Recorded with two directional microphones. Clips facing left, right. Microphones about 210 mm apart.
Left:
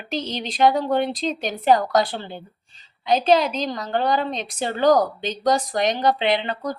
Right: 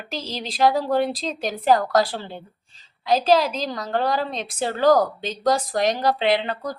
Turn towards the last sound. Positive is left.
turn(degrees=0)  # may be behind; listen again after turning